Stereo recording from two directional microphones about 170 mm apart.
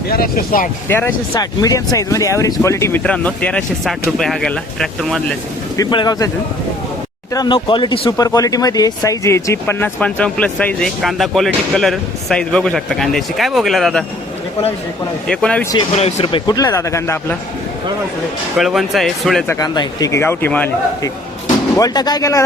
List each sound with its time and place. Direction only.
0.1 s speech: 60° left (ahead or behind)
0.9 s speech: 15° left (ahead or behind)
5.7 s speech: 25° left (ahead or behind)
7.3 s speech: 25° left (ahead or behind); by 14.0 s centre (ahead or behind)
15.3 s speech: 5° left (ahead or behind)
16.0 s speech: 40° left (ahead or behind); by 17.3 s 15° left (ahead or behind)
18.5 s speech: centre (ahead or behind)
19.5 s speech: 20° left (ahead or behind)
21.8 s speech: 25° left (ahead or behind)